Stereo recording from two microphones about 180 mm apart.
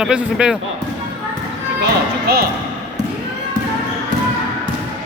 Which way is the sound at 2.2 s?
60° right (ahead or behind).